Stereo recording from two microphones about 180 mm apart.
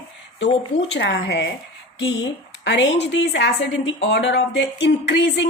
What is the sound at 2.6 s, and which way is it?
Speech, 80° left.